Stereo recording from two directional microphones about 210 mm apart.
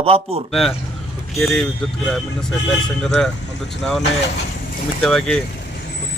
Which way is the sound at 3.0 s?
Centre (ahead or behind).